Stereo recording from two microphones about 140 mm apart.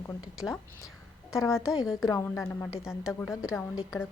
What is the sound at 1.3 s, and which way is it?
A woman's voice, 20° left (ahead or behind).